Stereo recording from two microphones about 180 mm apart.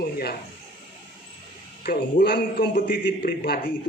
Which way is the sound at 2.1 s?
55° left (ahead or behind).